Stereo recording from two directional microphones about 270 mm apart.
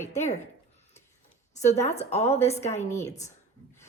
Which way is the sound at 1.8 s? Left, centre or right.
Left.